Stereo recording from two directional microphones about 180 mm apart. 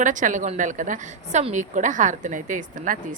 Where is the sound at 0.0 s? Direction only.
45° right (ahead or behind).